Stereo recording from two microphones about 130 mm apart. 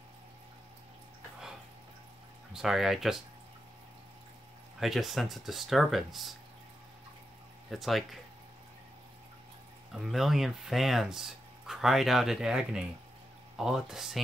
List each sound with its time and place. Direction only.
2.5 s speech: 5° right (ahead or behind)
4.7 s speech: centre (ahead or behind)
7.7 s speech: centre (ahead or behind)
9.9 s speech: centre (ahead or behind)